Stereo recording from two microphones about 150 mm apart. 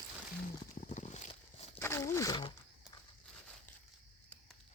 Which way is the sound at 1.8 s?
20° left (ahead or behind).